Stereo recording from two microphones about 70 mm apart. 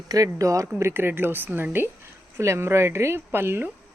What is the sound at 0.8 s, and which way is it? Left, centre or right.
A woman's voice, right.